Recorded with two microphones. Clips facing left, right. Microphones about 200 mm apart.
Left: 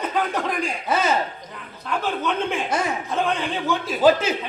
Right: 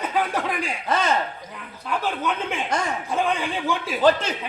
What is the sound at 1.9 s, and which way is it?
A man's voice, 5° right (ahead or behind).